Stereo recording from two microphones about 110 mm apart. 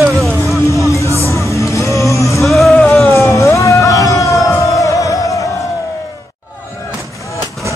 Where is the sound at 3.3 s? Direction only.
25° left (ahead or behind).